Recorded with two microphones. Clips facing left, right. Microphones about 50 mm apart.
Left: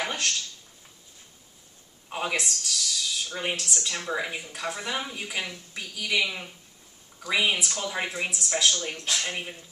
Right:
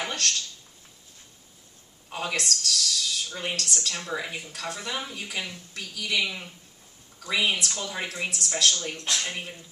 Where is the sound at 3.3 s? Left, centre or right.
Centre.